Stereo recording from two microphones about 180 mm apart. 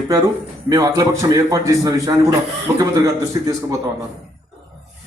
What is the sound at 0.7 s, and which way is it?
A man's voice, 20° right (ahead or behind).